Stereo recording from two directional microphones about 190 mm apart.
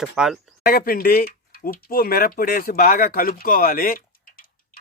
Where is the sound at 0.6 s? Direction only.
50° left (ahead or behind).